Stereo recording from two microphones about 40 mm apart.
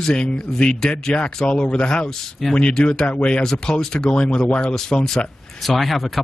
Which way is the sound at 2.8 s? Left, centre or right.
Centre.